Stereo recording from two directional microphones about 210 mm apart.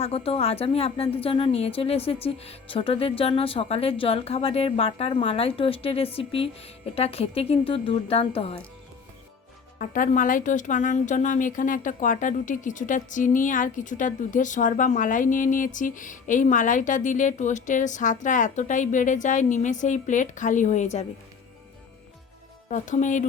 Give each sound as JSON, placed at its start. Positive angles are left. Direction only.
{"t": 0.0, "sound": "speech", "side_deg": 30}
{"t": 9.7, "sound": "speech", "side_deg": 40}
{"t": 22.7, "sound": "speech", "side_deg": 35}